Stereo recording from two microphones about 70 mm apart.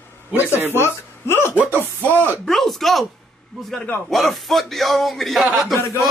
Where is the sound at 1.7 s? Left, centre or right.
Right.